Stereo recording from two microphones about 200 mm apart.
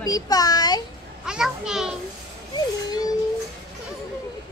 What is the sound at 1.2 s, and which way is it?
Speech, 5° right (ahead or behind).